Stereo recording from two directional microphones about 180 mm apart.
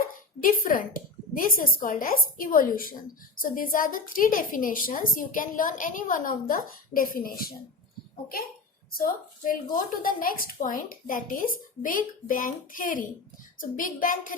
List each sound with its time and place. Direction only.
0.4 s a woman's voice: 50° left (ahead or behind)
9.0 s a woman's voice: 45° left (ahead or behind)